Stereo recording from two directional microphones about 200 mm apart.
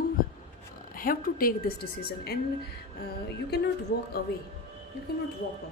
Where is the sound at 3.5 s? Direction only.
55° left (ahead or behind).